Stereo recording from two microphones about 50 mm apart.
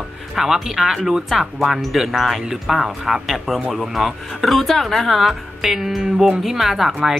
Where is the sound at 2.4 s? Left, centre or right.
Centre.